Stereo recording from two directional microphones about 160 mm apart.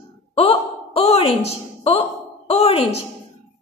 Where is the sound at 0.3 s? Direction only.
35° left (ahead or behind).